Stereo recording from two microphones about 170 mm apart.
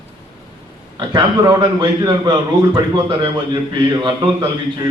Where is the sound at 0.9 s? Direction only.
25° right (ahead or behind).